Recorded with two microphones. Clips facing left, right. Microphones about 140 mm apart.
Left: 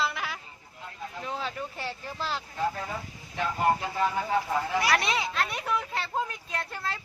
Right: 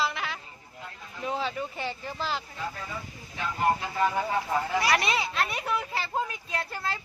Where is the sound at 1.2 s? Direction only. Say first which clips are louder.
Right 5 dB; centre (ahead or behind).